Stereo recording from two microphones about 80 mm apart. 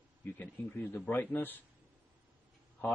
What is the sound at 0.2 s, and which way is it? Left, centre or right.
Speech, left.